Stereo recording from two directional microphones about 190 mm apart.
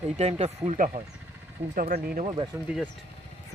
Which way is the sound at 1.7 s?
50° right (ahead or behind).